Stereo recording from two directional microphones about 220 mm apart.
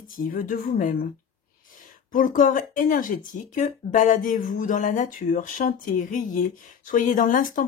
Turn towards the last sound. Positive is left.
turn(degrees=35)  # may be behind; listen again after turning